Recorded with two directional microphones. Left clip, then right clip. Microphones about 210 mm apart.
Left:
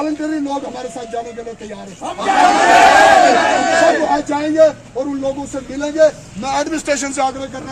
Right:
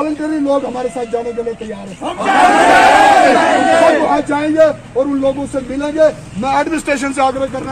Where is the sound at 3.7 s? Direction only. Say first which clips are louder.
Right 3 dB; 20° left (ahead or behind).